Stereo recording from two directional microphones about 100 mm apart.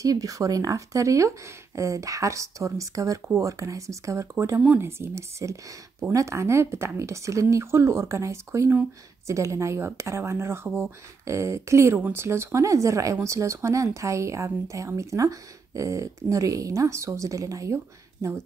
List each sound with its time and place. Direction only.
0.0 s speech: 35° right (ahead or behind)
4.6 s speech: 15° right (ahead or behind)
4.8 s speech: 25° right (ahead or behind)